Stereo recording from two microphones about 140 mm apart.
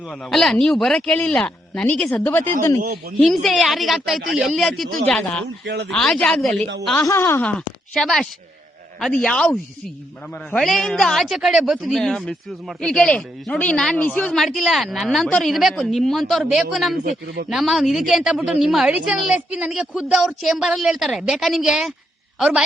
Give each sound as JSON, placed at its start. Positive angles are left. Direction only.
{"t": 0.1, "sound": "speech", "side_deg": 0}
{"t": 3.2, "sound": "a woman's voice", "side_deg": 0}
{"t": 7.0, "sound": "a woman's voice", "side_deg": 20}
{"t": 16.9, "sound": "speech", "side_deg": -80}
{"t": 17.5, "sound": "a woman's voice", "side_deg": 0}